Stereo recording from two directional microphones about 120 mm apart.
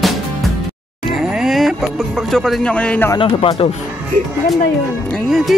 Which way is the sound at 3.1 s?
50° left (ahead or behind).